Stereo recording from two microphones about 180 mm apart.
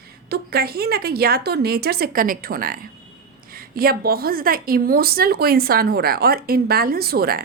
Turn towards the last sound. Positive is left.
turn(degrees=-55)  # may be behind; listen again after turning